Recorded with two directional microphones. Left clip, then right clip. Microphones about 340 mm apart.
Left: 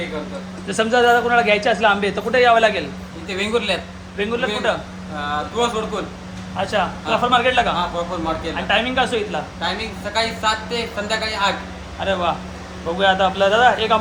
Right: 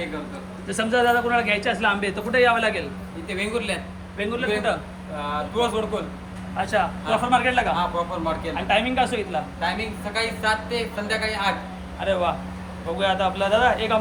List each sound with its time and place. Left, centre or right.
0.7 s speech: centre